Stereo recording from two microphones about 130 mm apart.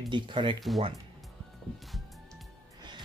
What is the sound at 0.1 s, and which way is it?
Speech, 40° right (ahead or behind).